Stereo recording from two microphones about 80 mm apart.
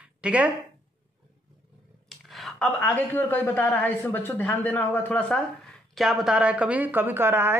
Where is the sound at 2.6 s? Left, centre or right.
Centre.